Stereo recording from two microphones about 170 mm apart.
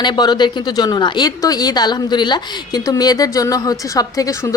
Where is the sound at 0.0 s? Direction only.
25° left (ahead or behind).